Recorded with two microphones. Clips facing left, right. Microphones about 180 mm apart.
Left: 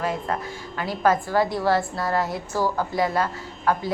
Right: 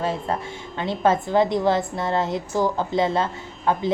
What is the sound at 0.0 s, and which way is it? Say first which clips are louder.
Music: right 1 dB; 30° right (ahead or behind).